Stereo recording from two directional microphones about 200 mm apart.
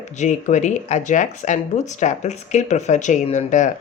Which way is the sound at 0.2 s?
35° left (ahead or behind).